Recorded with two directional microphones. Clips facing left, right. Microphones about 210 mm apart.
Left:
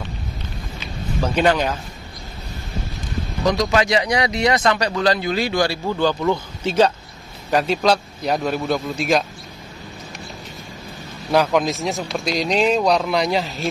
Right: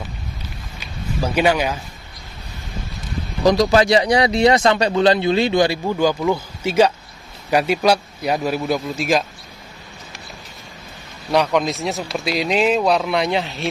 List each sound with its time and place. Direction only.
1.2 s a man's voice: 10° right (ahead or behind)
3.4 s a man's voice: 35° right (ahead or behind); by 9.2 s centre (ahead or behind)
11.3 s speech: centre (ahead or behind)